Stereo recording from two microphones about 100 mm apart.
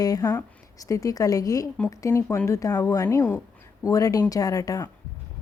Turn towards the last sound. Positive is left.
turn(degrees=35)  # may be behind; listen again after turning